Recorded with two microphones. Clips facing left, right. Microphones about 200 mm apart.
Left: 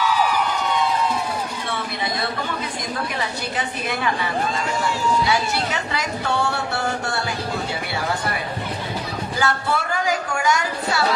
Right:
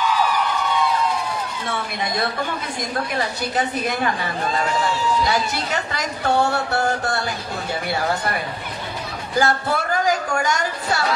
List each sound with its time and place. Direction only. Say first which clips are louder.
3.2 s speech: right 3 dB; 40° right (ahead or behind)
9.4 s speech: right 3 dB; 40° right (ahead or behind)